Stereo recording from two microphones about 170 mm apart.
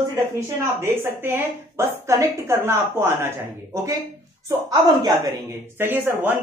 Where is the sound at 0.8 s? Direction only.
15° right (ahead or behind).